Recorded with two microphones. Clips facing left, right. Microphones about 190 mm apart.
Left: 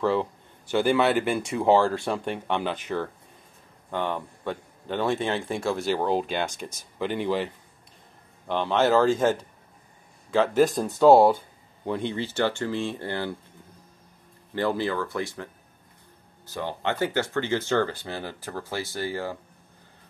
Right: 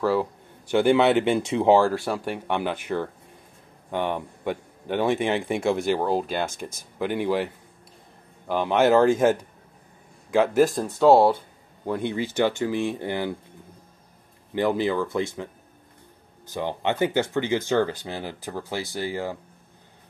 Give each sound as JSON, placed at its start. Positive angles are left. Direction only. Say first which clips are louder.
{"t": 0.0, "sound": "speech", "louder": "right 1 dB", "side_deg": -10}
{"t": 5.9, "sound": "speech", "louder": "right 1 dB", "side_deg": -5}
{"t": 14.5, "sound": "speech", "louder": "right 3 dB", "side_deg": -15}